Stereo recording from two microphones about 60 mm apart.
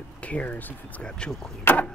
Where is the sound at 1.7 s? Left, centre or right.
Left.